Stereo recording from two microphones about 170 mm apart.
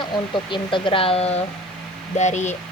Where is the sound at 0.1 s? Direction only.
30° left (ahead or behind).